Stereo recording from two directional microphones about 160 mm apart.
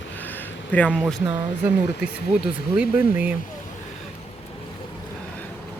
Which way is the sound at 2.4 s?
5° right (ahead or behind).